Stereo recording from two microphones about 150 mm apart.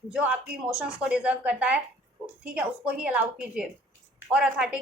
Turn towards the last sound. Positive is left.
turn(degrees=-5)  # may be behind; listen again after turning